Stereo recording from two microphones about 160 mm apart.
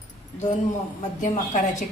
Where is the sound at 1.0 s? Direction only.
50° left (ahead or behind).